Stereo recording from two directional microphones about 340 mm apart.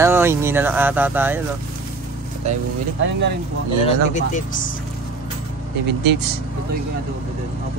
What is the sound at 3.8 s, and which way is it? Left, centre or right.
Speech, left.